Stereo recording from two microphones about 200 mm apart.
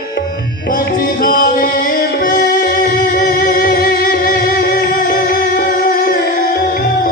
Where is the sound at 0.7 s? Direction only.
45° left (ahead or behind).